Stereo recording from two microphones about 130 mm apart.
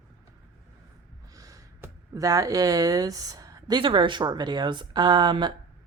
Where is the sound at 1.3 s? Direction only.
25° right (ahead or behind).